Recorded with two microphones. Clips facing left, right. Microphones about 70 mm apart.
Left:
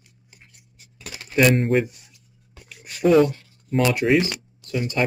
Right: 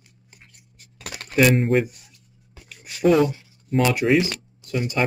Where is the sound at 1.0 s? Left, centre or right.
Right.